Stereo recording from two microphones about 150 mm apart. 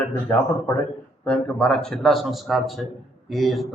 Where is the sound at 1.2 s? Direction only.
5° left (ahead or behind).